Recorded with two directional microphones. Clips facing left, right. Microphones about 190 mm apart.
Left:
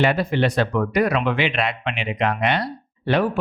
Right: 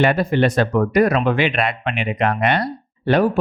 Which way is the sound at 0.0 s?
50° right (ahead or behind).